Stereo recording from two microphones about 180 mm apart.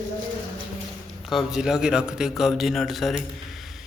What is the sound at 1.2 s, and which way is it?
A man's voice, centre (ahead or behind).